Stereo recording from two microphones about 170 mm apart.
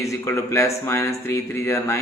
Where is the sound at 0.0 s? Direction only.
20° left (ahead or behind).